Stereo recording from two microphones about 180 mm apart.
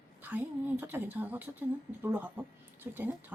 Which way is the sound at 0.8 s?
10° right (ahead or behind).